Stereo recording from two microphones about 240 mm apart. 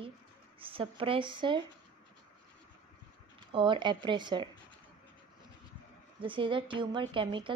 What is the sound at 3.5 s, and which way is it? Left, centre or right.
Speech, centre.